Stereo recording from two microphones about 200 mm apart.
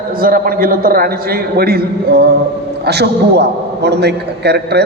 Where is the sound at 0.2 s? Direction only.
45° right (ahead or behind).